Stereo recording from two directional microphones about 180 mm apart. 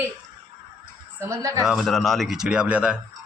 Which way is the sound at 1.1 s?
15° right (ahead or behind).